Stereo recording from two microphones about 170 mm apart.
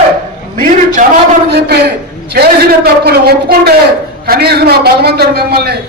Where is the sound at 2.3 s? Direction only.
70° right (ahead or behind).